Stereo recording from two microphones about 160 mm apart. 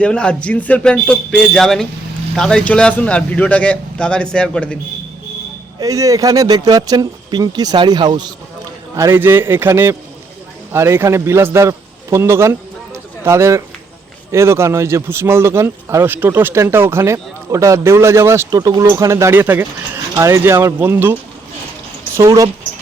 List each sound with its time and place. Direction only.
0.0 s a man's voice: 5° left (ahead or behind)
5.8 s speech: 20° right (ahead or behind)
9.0 s a man's voice: 15° right (ahead or behind)